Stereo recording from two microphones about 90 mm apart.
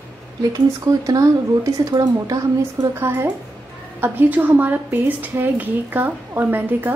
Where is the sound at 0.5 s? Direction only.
45° right (ahead or behind).